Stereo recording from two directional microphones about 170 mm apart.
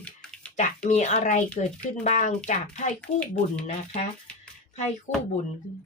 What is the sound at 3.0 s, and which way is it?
Speech, 10° left (ahead or behind).